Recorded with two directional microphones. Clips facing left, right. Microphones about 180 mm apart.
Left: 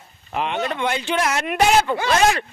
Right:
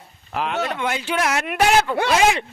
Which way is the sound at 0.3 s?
Centre (ahead or behind).